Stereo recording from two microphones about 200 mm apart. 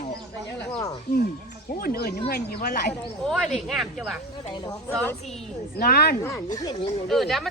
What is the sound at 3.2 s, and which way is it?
Speech, centre (ahead or behind).